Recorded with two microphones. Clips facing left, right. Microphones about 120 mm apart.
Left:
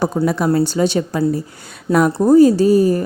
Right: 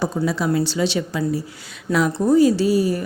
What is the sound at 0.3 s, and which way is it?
A woman's voice, 50° left (ahead or behind).